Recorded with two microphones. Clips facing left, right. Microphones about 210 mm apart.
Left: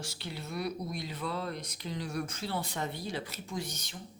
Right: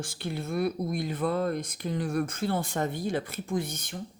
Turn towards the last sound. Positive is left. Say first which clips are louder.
# right 8 dB
turn(degrees=-55)  # may be behind; listen again after turning